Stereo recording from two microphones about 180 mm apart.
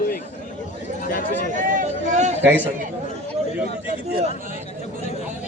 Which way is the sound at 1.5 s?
50° right (ahead or behind).